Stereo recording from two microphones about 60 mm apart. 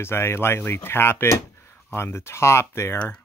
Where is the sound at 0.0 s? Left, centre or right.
Left.